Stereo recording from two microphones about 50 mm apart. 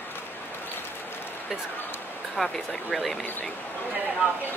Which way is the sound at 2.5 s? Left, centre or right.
Centre.